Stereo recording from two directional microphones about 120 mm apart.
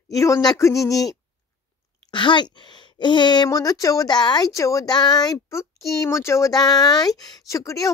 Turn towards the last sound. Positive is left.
turn(degrees=30)  # may be behind; listen again after turning